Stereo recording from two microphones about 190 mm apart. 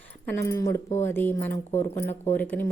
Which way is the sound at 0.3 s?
15° left (ahead or behind).